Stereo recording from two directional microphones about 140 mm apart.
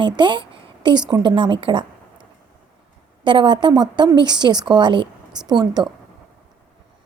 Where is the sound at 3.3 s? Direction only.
35° right (ahead or behind).